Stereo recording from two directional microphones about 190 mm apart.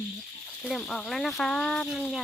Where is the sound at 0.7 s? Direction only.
Centre (ahead or behind).